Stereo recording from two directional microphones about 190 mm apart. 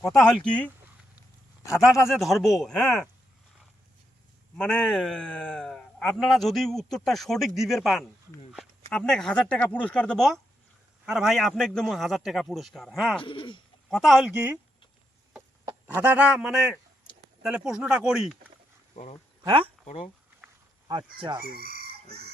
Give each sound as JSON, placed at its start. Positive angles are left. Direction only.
{"t": 0.0, "sound": "a man's voice", "side_deg": 0}
{"t": 1.7, "sound": "a man's voice", "side_deg": -5}
{"t": 4.5, "sound": "a man's voice", "side_deg": 5}
{"t": 13.2, "sound": "speech", "side_deg": 25}
{"t": 13.9, "sound": "a man's voice", "side_deg": 0}
{"t": 15.3, "sound": "a sound", "side_deg": -10}
{"t": 17.4, "sound": "a man's voice", "side_deg": -5}
{"t": 19.4, "sound": "speech", "side_deg": -25}
{"t": 19.8, "sound": "speech", "side_deg": 35}
{"t": 20.8, "sound": "speech", "side_deg": -25}
{"t": 21.6, "sound": "chicken", "side_deg": -50}